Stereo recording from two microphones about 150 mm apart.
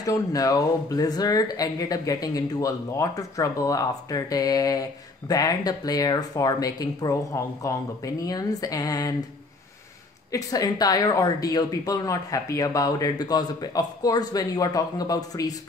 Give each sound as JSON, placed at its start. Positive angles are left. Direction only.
{"t": 0.0, "sound": "a woman's voice", "side_deg": 25}
{"t": 10.3, "sound": "a woman's voice", "side_deg": 25}